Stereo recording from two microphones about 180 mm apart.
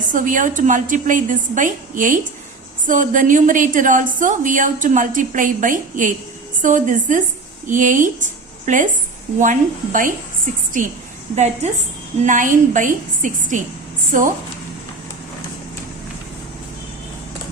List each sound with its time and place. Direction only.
0.0 s a woman's voice: 45° right (ahead or behind)